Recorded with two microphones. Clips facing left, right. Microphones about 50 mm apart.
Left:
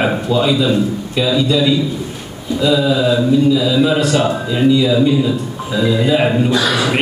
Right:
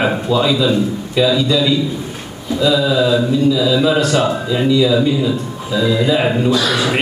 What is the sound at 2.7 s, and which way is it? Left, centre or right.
A man's voice, centre.